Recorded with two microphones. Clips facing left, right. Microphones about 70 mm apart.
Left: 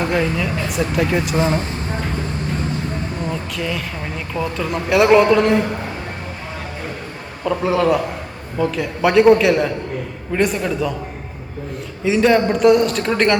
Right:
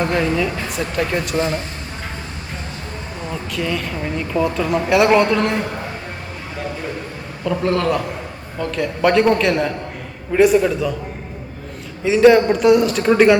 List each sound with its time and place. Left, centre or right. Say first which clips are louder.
0.0 s speech: right 1 dB; centre
1.4 s speech: left 2 dB; left
3.5 s speech: right 2 dB; centre
7.4 s speech: left 2 dB; centre
12.0 s speech: right 3 dB; centre